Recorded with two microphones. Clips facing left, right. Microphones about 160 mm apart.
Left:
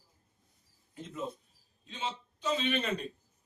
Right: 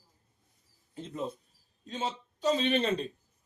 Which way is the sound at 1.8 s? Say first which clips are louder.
Right 4 dB; 40° right (ahead or behind).